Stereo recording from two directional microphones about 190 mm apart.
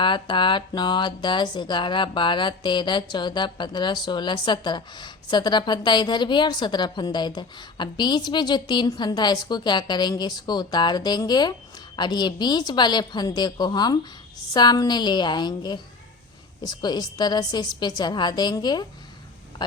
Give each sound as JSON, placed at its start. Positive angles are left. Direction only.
{"t": 0.0, "sound": "speech", "side_deg": 25}